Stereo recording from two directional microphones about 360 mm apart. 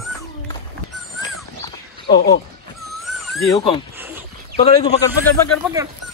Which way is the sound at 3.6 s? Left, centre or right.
Centre.